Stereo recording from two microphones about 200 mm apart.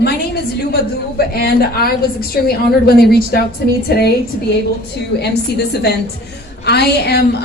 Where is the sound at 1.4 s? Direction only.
50° left (ahead or behind).